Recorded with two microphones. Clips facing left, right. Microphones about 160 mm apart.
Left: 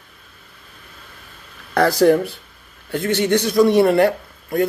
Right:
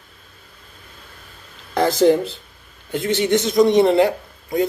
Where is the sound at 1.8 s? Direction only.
20° right (ahead or behind).